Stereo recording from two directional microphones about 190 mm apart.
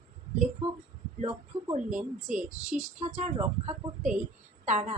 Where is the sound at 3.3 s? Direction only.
30° right (ahead or behind).